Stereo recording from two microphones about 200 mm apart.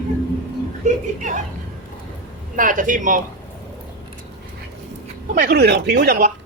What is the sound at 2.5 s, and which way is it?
Speech, 40° right (ahead or behind).